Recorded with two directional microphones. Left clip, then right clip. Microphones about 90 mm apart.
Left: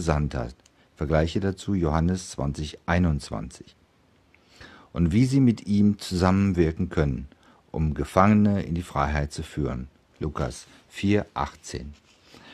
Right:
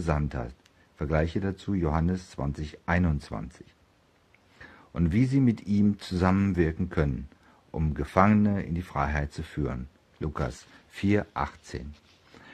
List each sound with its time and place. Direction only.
0.0 s speech: 30° left (ahead or behind)